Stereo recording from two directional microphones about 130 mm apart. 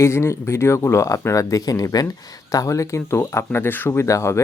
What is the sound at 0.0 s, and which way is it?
Speech, 20° left (ahead or behind).